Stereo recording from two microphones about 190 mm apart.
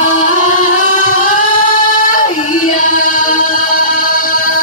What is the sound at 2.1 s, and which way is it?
Music, 40° left (ahead or behind).